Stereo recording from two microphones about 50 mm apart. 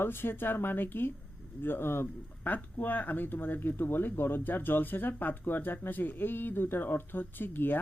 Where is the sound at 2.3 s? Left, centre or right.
Left.